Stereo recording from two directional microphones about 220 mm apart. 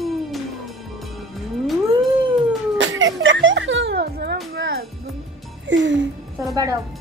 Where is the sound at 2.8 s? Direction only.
60° right (ahead or behind).